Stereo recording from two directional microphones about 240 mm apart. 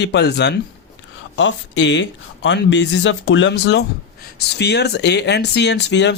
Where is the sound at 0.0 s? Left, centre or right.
Left.